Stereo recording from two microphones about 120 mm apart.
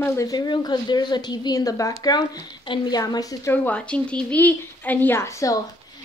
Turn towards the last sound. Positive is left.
turn(degrees=25)  # may be behind; listen again after turning